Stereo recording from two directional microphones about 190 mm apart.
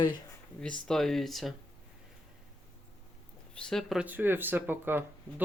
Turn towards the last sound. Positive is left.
turn(degrees=-10)  # may be behind; listen again after turning